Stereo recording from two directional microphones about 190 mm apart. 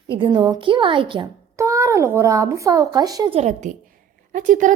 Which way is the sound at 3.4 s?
40° right (ahead or behind).